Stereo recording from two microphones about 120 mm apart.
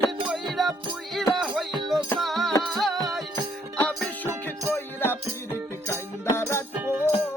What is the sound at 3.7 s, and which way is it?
Music, 10° left (ahead or behind).